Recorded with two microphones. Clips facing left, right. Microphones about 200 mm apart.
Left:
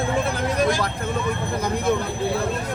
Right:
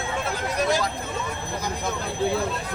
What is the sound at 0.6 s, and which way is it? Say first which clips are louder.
Speech: left 1 dB; 50° left (ahead or behind).